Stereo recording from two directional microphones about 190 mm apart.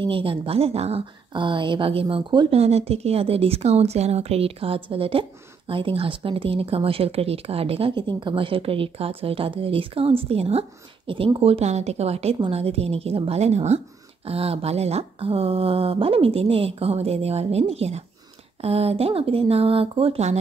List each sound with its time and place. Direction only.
0.0 s speech: 30° right (ahead or behind)